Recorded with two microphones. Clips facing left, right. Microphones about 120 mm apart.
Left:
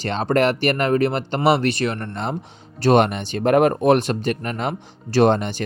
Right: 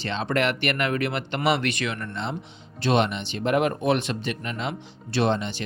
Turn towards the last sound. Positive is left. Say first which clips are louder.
# left 7 dB
turn(degrees=50)  # may be behind; listen again after turning